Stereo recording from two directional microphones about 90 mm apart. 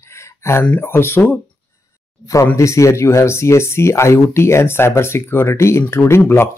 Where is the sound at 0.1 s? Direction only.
30° left (ahead or behind).